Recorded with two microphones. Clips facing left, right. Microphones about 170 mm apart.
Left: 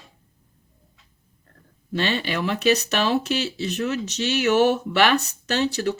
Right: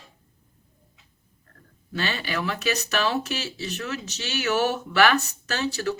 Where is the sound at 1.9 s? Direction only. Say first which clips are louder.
Left 4 dB; 30° left (ahead or behind).